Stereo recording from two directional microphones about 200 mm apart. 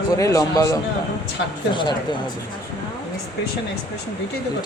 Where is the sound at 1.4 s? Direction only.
60° left (ahead or behind).